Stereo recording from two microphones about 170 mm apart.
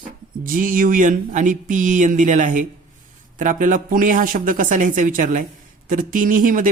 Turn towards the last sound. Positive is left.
turn(degrees=-55)  # may be behind; listen again after turning